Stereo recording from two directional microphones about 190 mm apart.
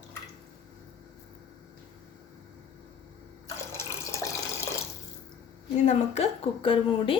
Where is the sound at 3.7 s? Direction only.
15° left (ahead or behind).